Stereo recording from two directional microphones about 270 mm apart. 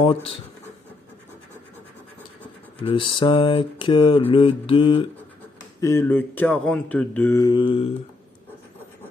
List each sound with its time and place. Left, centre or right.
2.8 s mantra: centre